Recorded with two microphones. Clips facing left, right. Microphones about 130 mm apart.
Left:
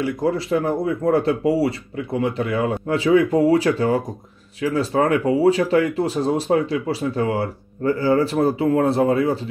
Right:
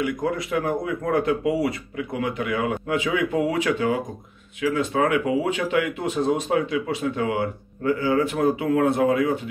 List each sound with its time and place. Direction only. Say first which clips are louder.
0.0 s speech: left 3 dB; 30° left (ahead or behind)